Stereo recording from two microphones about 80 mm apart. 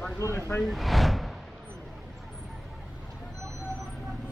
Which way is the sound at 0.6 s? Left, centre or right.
Centre.